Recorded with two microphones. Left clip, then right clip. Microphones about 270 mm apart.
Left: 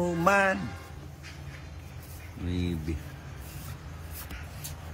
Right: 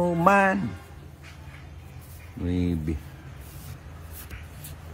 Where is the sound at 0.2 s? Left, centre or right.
Centre.